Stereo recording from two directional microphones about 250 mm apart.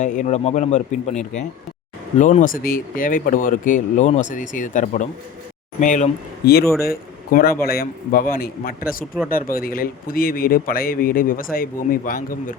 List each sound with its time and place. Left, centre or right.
0.0 s a man's voice: left